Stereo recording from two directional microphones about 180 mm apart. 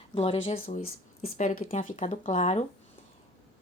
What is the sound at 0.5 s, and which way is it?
Speech, 50° left (ahead or behind).